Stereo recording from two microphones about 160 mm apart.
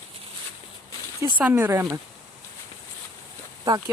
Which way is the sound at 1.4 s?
10° right (ahead or behind).